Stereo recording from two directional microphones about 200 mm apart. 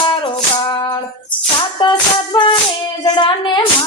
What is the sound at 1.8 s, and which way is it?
Speech, 25° left (ahead or behind).